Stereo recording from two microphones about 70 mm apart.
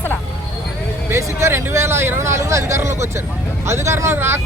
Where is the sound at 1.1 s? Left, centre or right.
Right.